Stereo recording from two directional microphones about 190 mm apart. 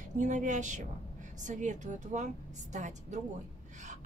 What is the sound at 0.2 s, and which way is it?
A woman's voice, 40° right (ahead or behind).